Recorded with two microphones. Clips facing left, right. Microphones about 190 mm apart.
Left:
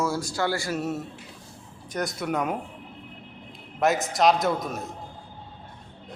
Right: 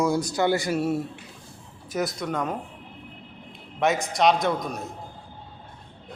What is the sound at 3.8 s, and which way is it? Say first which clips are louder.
A man's voice: even; centre (ahead or behind).